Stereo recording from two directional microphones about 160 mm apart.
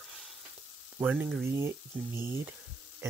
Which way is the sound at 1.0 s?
10° right (ahead or behind).